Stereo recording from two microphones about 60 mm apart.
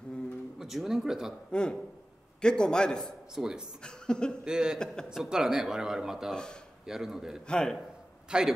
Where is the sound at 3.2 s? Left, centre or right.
Centre.